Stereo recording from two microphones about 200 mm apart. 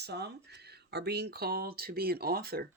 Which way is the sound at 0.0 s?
55° right (ahead or behind).